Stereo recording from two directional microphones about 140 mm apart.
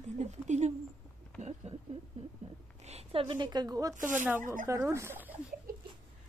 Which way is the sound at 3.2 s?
35° right (ahead or behind).